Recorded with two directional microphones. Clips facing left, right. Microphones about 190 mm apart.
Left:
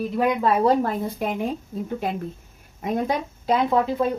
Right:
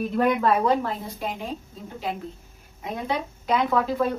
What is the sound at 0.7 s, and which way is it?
Speech, 50° left (ahead or behind).